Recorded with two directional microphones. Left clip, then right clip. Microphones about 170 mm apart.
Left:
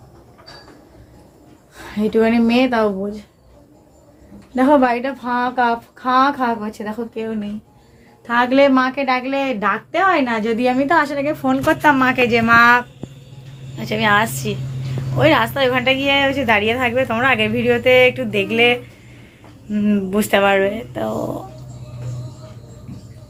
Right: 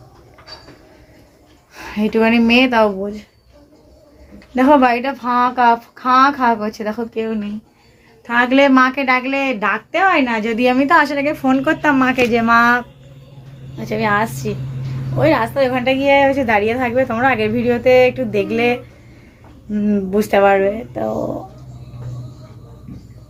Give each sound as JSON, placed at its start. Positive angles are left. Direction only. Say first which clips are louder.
{"t": 1.7, "sound": "a woman's voice", "louder": "even", "side_deg": -15}
{"t": 4.5, "sound": "speech", "louder": "right 2 dB", "side_deg": -10}
{"t": 8.3, "sound": "a woman's voice", "louder": "right 1 dB", "side_deg": 0}